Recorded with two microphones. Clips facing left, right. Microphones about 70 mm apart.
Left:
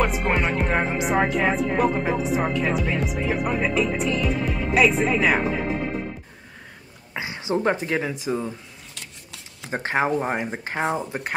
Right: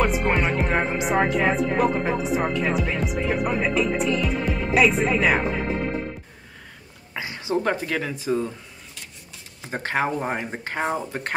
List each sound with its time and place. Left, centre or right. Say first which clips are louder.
0.0 s speech: right 1 dB; centre
7.2 s speech: even; left
9.7 s speech: left 2 dB; left